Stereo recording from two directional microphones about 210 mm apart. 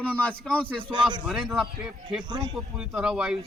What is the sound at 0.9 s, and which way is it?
Speech, 20° right (ahead or behind).